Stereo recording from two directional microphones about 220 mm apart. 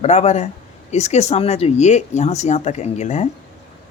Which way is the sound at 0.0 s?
30° left (ahead or behind).